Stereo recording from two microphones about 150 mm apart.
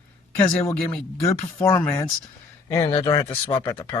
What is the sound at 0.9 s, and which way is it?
Speech, 20° left (ahead or behind).